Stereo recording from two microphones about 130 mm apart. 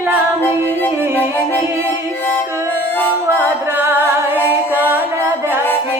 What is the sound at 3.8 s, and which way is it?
Music, 15° right (ahead or behind).